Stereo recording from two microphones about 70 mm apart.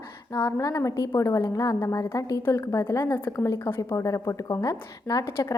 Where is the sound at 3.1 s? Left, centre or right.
Left.